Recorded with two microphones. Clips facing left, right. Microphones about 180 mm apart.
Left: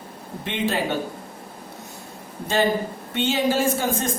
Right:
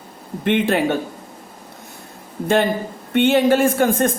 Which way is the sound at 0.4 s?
55° right (ahead or behind).